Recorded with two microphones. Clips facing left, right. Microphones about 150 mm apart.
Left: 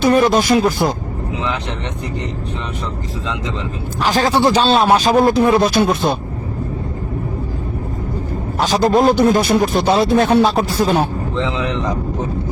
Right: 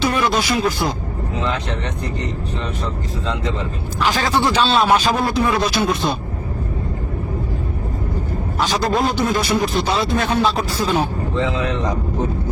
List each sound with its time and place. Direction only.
0.0 s a man's voice: 45° left (ahead or behind)
4.0 s a man's voice: 40° left (ahead or behind)
8.5 s a man's voice: 45° left (ahead or behind)